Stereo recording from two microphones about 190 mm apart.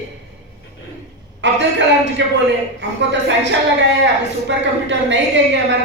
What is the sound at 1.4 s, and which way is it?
A woman's voice, 65° right (ahead or behind).